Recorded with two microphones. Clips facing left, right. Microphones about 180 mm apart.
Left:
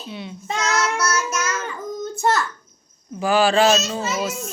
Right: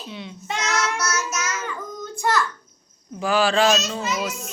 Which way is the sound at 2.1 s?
25° left (ahead or behind).